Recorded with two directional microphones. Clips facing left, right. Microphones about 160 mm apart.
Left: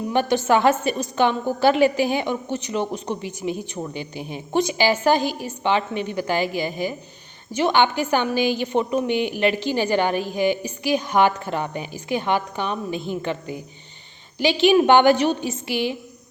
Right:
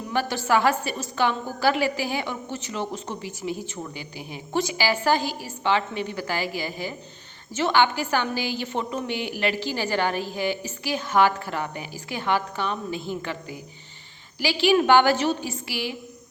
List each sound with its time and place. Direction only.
0.1 s a woman's voice: 20° left (ahead or behind)